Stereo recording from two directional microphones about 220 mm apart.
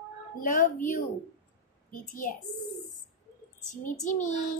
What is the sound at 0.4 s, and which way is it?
Speech, 40° left (ahead or behind).